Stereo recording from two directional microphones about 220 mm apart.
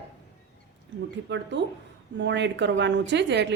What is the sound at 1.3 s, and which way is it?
Speech, 55° right (ahead or behind).